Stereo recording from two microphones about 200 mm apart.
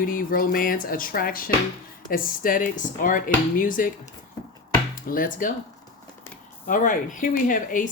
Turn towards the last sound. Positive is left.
turn(degrees=45)  # may be behind; listen again after turning